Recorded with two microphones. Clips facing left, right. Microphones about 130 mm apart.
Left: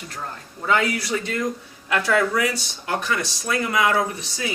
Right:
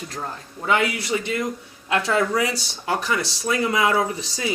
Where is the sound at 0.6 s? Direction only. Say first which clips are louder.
Even; 20° right (ahead or behind).